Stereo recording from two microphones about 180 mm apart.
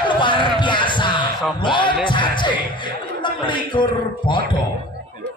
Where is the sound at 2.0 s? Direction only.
25° left (ahead or behind).